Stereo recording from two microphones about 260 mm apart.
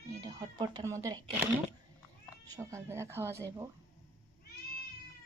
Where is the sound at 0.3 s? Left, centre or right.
Centre.